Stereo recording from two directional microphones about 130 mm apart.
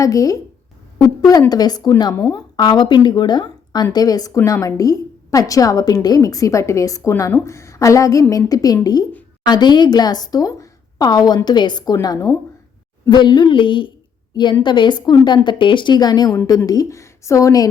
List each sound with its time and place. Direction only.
0.0 s a woman's voice: 25° left (ahead or behind)